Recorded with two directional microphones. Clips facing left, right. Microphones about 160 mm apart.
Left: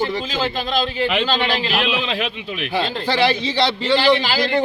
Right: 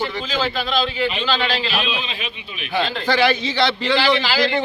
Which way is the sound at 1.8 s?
90° left.